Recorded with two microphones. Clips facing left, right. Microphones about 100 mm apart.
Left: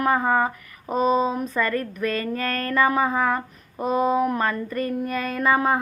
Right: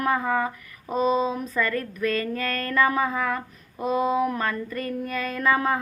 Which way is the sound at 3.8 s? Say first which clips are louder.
Left 2 dB; 45° left (ahead or behind).